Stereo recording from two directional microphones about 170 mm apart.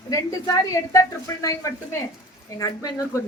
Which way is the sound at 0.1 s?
20° left (ahead or behind).